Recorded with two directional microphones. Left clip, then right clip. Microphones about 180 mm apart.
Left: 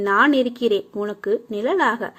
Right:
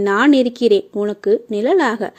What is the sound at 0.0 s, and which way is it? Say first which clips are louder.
Speech: right 3 dB; 35° right (ahead or behind).